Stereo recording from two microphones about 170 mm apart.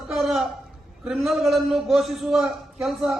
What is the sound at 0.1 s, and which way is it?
Chuckle, centre (ahead or behind).